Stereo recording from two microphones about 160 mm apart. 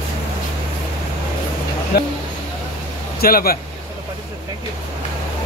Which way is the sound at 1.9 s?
80° left.